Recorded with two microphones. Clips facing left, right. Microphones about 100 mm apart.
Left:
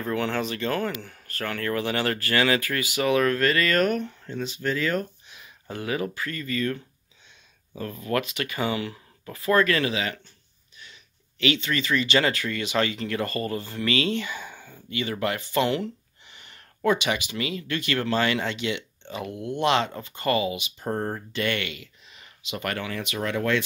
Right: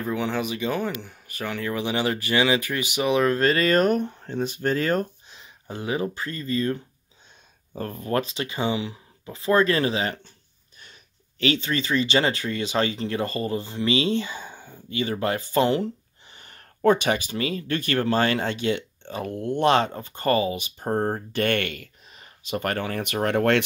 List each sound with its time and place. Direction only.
0.0 s speech: 10° right (ahead or behind); by 5.4 s 40° right (ahead or behind)
5.4 s speech: 20° right (ahead or behind)
7.7 s speech: 45° right (ahead or behind)
21.3 s speech: 50° right (ahead or behind)